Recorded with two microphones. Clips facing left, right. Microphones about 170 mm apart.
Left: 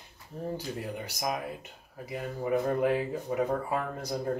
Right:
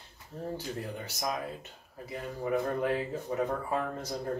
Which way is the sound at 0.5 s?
10° left (ahead or behind).